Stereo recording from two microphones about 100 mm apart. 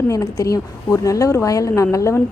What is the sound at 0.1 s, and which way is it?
A woman's voice, 35° left (ahead or behind).